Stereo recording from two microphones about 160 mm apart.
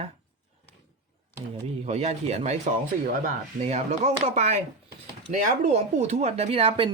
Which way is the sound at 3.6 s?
45° right (ahead or behind).